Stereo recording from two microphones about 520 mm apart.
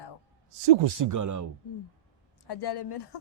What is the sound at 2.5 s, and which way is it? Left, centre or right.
Speech, left.